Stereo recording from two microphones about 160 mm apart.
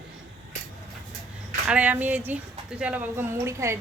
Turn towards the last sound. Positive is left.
turn(degrees=-15)  # may be behind; listen again after turning